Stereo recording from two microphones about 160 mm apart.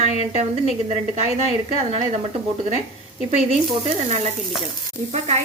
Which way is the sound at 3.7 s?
40° right (ahead or behind).